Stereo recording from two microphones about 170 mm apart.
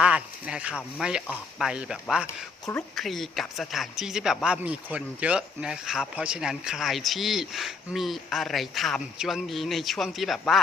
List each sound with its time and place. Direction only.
0.0 s a sound: 5° right (ahead or behind)
0.9 s speech: 5° right (ahead or behind)
2.2 s speech: 15° left (ahead or behind)
2.9 s speech: centre (ahead or behind)